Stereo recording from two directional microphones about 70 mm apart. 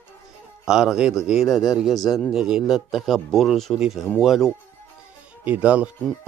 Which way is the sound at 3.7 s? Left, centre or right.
Centre.